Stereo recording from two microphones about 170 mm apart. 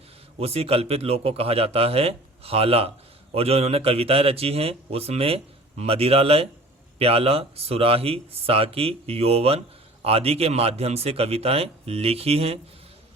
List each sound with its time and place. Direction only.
0.3 s speech: 35° right (ahead or behind)